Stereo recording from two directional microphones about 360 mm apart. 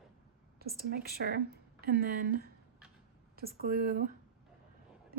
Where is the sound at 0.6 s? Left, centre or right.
Right.